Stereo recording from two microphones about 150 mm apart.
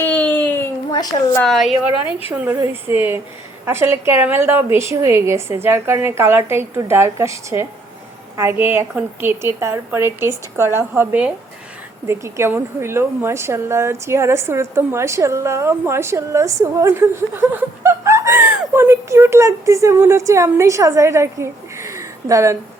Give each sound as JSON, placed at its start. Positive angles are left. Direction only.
{"t": 0.0, "sound": "a sound", "side_deg": 10}
{"t": 0.9, "sound": "a woman's voice", "side_deg": 25}
{"t": 1.4, "sound": "a woman's voice", "side_deg": 0}
{"t": 2.0, "sound": "a woman's voice", "side_deg": 40}
{"t": 2.3, "sound": "a woman's voice", "side_deg": -10}